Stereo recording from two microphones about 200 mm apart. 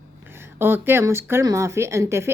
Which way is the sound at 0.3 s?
10° right (ahead or behind).